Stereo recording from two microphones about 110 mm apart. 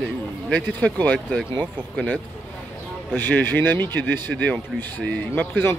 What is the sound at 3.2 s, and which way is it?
Speech, 20° left (ahead or behind).